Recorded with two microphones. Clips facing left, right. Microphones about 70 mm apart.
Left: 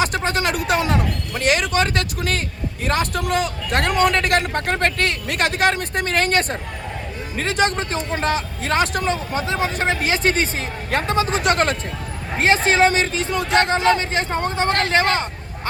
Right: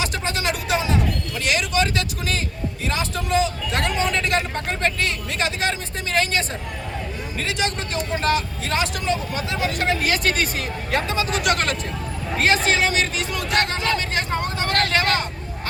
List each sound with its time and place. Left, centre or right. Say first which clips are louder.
0.0 s a sound: left 4 dB; left
2.8 s vehicle: left 5 dB; left
7.3 s speech: left 6 dB; left
10.9 s a man's voice: left 3 dB; left